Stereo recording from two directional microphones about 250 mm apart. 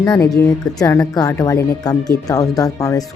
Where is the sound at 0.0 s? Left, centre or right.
Centre.